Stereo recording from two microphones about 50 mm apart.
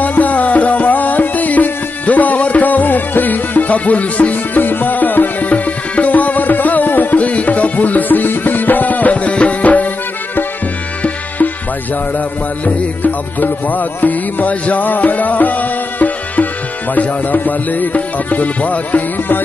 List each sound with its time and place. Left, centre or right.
0.0 s music: left
11.0 s music: left
12.6 s music: left